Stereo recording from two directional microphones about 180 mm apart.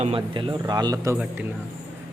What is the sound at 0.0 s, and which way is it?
Speech, 30° right (ahead or behind).